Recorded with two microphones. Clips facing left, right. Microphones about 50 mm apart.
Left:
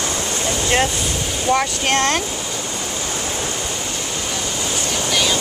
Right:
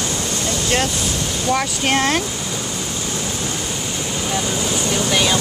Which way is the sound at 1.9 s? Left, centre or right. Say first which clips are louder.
Right 2 dB; centre.